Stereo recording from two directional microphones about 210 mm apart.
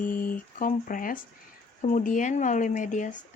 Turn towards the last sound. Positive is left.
turn(degrees=35)  # may be behind; listen again after turning